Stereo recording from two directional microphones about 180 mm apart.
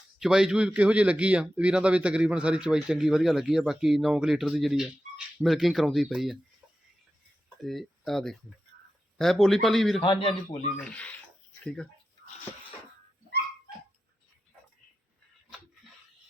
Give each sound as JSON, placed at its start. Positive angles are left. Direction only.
{"t": 0.2, "sound": "a man's voice", "side_deg": -5}
{"t": 7.6, "sound": "a man's voice", "side_deg": 0}
{"t": 10.0, "sound": "a man's voice", "side_deg": 30}
{"t": 10.8, "sound": "speech", "side_deg": 5}